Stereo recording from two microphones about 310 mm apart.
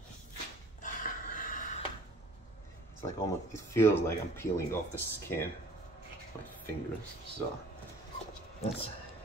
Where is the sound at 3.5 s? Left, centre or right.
Centre.